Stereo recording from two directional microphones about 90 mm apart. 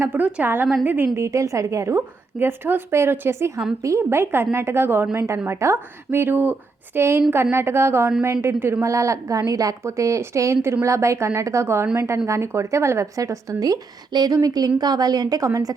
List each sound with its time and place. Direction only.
0.0 s a woman's voice: 20° right (ahead or behind)
1.1 s a woman's voice: 35° right (ahead or behind)
15.4 s a woman's voice: 35° right (ahead or behind)